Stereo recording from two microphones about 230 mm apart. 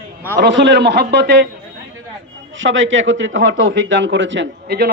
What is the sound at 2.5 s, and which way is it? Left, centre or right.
A man's voice, right.